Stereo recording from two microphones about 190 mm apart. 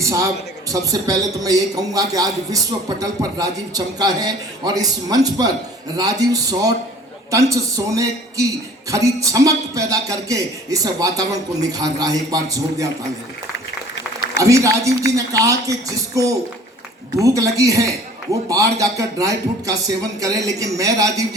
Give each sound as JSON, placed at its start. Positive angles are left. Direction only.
{"t": 0.0, "sound": "a man's voice", "side_deg": -15}
{"t": 14.4, "sound": "a man's voice", "side_deg": -15}